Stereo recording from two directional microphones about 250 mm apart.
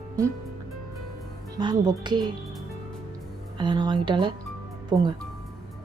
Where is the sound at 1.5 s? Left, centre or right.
Centre.